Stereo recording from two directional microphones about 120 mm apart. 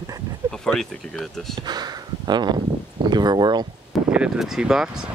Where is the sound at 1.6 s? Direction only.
35° right (ahead or behind).